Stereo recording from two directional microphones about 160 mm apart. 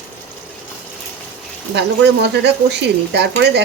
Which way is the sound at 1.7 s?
90° right.